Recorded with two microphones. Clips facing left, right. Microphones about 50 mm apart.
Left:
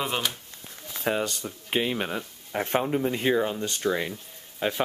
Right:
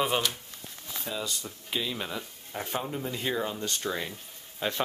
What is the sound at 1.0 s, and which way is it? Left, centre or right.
Speech, left.